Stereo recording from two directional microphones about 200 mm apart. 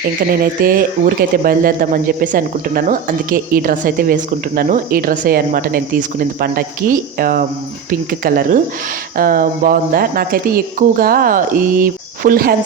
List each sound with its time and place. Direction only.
0.3 s speech: 45° right (ahead or behind)